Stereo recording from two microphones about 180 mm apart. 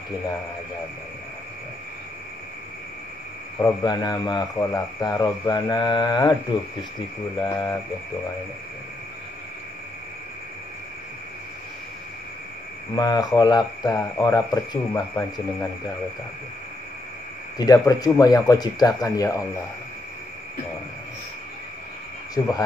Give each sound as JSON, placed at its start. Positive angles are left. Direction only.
{"t": 3.5, "sound": "speech", "side_deg": 20}
{"t": 7.3, "sound": "a sound", "side_deg": 15}
{"t": 12.9, "sound": "speech", "side_deg": 20}
{"t": 17.6, "sound": "speech", "side_deg": 20}